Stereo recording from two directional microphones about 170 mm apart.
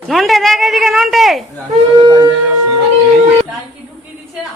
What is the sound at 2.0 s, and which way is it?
Speech, 25° right (ahead or behind).